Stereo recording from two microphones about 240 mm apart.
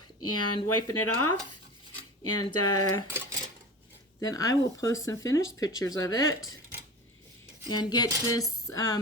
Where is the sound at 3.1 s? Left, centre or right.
Centre.